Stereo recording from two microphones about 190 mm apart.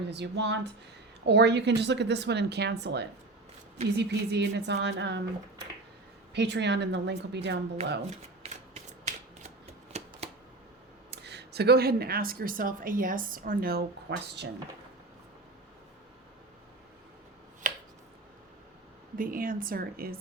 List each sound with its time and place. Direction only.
0.0 s speech: 65° right (ahead or behind)
6.3 s speech: 65° right (ahead or behind)
7.8 s speech: 35° right (ahead or behind)
8.4 s shuffling cards: 35° right (ahead or behind)
11.1 s speech: 60° right (ahead or behind)
14.1 s speech: 70° right (ahead or behind)
19.1 s speech: 50° right (ahead or behind)